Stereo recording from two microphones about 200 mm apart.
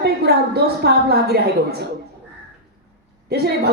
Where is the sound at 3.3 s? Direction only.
50° right (ahead or behind).